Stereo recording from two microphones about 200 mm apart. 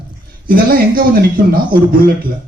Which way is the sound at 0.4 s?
45° right (ahead or behind).